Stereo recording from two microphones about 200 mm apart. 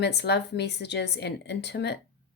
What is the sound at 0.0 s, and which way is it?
Speech, 55° left (ahead or behind).